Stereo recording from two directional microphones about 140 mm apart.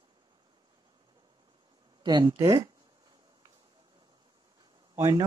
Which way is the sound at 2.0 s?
30° right (ahead or behind).